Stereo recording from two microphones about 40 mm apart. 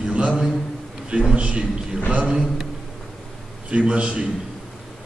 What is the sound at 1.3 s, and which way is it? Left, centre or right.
Speech, right.